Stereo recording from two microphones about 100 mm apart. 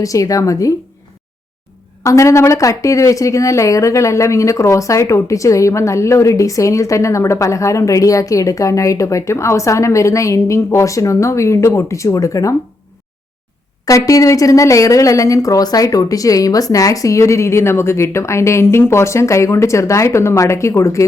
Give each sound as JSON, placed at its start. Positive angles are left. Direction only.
{"t": 0.0, "sound": "speech", "side_deg": 35}
{"t": 2.0, "sound": "speech", "side_deg": 30}
{"t": 13.8, "sound": "speech", "side_deg": 35}